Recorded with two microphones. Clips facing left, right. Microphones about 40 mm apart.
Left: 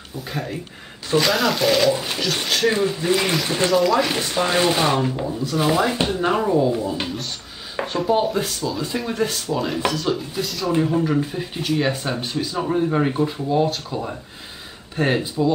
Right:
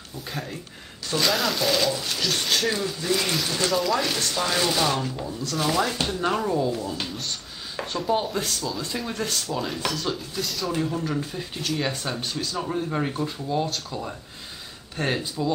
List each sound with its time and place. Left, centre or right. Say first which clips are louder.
0.3 s speech: left 5 dB; centre
2.0 s speech: left 4 dB; left
2.4 s speech: left 6 dB; centre
2.7 s speech: left 6 dB; left
3.7 s speech: left 7 dB; centre
4.1 s speech: left 5 dB; left
7.7 s a sound: left 5 dB; centre
8.0 s speech: left 5 dB; centre
10.7 s speech: left 9 dB; left